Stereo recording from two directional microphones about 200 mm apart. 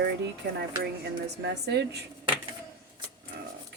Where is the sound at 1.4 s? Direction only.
60° right (ahead or behind).